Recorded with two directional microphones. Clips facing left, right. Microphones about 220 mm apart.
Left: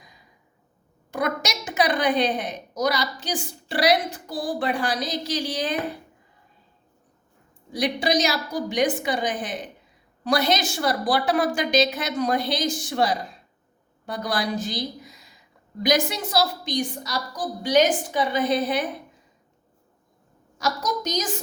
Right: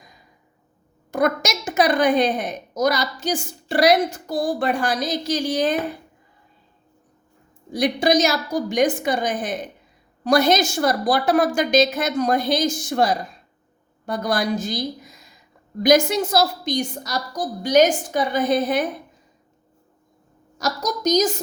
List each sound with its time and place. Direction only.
1.1 s a woman's voice: 45° right (ahead or behind)
7.7 s a woman's voice: 45° right (ahead or behind)
20.6 s a woman's voice: 40° right (ahead or behind)